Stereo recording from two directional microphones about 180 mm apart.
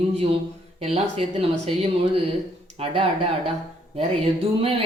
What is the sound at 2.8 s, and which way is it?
Speech, 30° right (ahead or behind).